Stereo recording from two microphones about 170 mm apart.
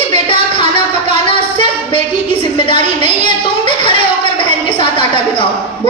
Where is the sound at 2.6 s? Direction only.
30° left (ahead or behind).